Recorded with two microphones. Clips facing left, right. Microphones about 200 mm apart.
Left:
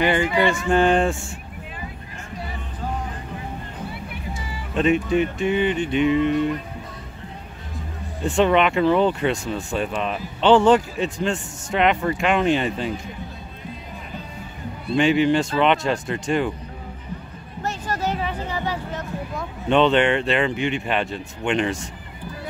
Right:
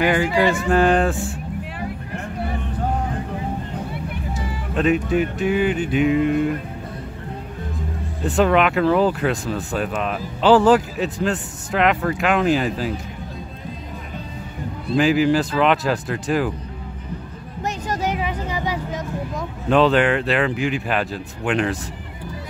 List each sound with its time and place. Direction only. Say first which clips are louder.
0.0 s speech: right 1 dB; 5° right (ahead or behind)
1.8 s vehicle: right 8 dB; 60° right (ahead or behind)
4.7 s speech: even; centre (ahead or behind)
8.2 s speech: right 1 dB; centre (ahead or behind)
15.0 s speech: right 1 dB; centre (ahead or behind)
17.6 s a sound: right 1 dB; 15° right (ahead or behind)
19.7 s speech: right 1 dB; centre (ahead or behind)